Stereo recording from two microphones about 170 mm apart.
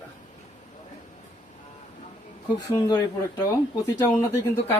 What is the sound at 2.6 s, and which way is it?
Speech, 20° left (ahead or behind).